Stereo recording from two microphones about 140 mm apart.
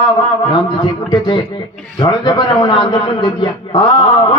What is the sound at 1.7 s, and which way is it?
Speech, 5° left (ahead or behind).